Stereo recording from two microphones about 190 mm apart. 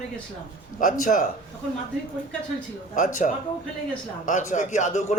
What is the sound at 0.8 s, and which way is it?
Speech, 45° left (ahead or behind).